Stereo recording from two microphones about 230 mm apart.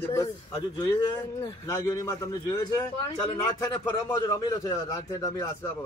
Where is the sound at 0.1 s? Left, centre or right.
Centre.